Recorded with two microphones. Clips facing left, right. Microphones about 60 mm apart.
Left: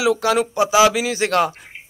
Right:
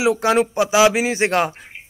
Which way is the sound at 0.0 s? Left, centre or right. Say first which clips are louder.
Right 1 dB; right.